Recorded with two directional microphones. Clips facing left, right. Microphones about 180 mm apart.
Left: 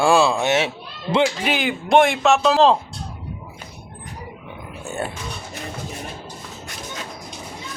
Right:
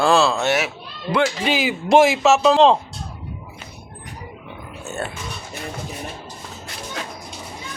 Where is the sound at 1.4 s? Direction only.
Centre (ahead or behind).